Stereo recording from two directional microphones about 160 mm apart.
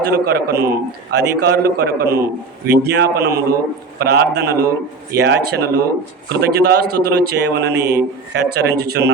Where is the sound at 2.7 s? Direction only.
90° right.